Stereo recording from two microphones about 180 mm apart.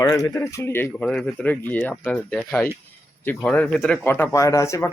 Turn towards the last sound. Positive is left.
turn(degrees=15)  # may be behind; listen again after turning